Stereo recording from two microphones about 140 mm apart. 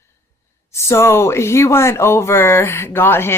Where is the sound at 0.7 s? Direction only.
20° left (ahead or behind).